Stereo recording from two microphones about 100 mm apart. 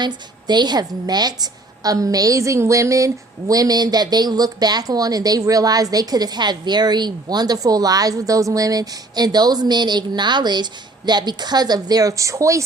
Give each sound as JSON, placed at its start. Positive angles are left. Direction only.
{"t": 0.0, "sound": "a woman's voice", "side_deg": -45}